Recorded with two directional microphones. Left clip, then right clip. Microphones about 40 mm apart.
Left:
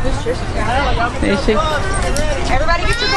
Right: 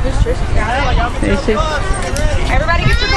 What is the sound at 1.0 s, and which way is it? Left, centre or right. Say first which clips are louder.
Speech: even; centre.